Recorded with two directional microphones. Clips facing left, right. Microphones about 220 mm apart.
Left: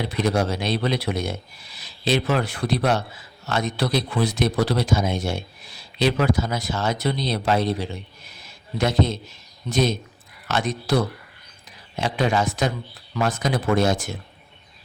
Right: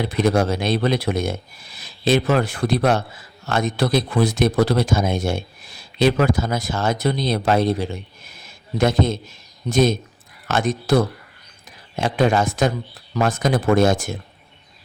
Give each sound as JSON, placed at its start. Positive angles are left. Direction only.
{"t": 0.0, "sound": "speech", "side_deg": -50}